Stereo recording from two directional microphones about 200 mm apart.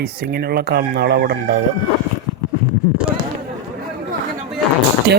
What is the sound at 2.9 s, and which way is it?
Speech, 5° right (ahead or behind).